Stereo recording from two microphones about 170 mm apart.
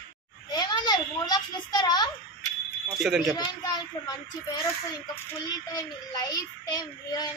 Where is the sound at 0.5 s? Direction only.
25° left (ahead or behind).